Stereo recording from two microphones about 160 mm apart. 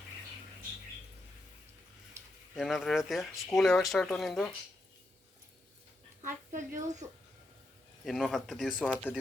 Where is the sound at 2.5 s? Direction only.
Centre (ahead or behind).